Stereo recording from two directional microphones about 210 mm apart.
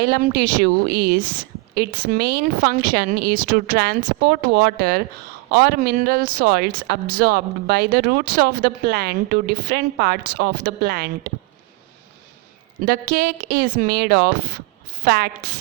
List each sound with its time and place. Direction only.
0.0 s speech: 50° right (ahead or behind)
12.8 s speech: 45° right (ahead or behind)